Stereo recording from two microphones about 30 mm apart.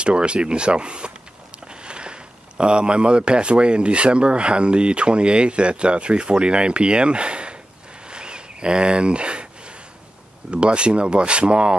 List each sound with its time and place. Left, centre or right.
0.0 s speech: right
8.1 s a sound: right
10.5 s speech: right